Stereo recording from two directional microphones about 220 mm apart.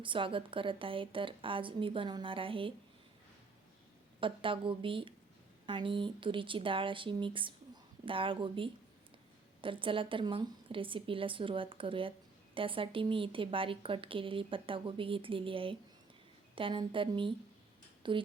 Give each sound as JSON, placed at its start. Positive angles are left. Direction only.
{"t": 0.0, "sound": "a woman's voice", "side_deg": -20}
{"t": 4.2, "sound": "a woman's voice", "side_deg": -25}